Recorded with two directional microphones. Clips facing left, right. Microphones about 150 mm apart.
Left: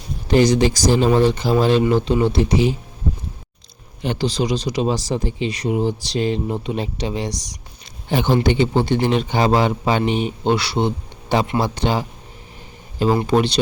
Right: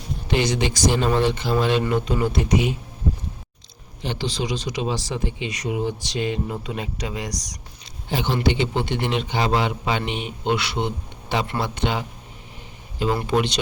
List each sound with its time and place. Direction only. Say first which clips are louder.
0.3 s speech: left 7 dB; 40° left (ahead or behind)
1.9 s speech: left 5 dB; 30° left (ahead or behind)
4.0 s speech: left 6 dB; 45° left (ahead or behind); by 7.3 s 30° left (ahead or behind)
8.1 s speech: left 5 dB; 50° left (ahead or behind)
13.2 s speech: left 4 dB; 35° left (ahead or behind)